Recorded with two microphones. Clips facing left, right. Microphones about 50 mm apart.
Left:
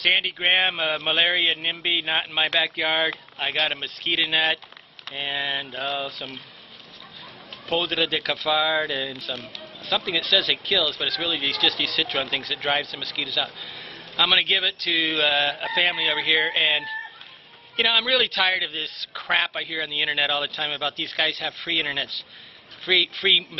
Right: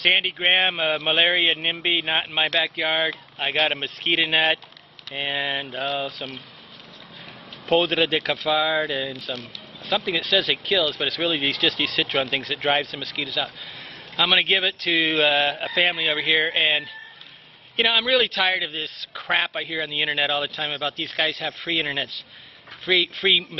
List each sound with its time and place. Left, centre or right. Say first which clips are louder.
0.0 s a man's voice: right 1 dB; centre; by 4.4 s right
5.1 s a man's voice: right 2 dB; centre
7.7 s a man's voice: right 4 dB; centre
15.0 s a man's voice: right 2 dB; centre